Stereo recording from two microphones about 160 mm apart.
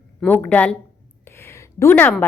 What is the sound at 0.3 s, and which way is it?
Speech, 10° left (ahead or behind).